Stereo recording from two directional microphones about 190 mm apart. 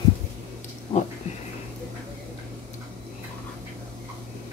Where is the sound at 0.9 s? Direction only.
30° left (ahead or behind).